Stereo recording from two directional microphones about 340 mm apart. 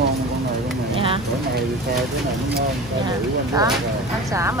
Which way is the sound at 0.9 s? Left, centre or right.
Centre.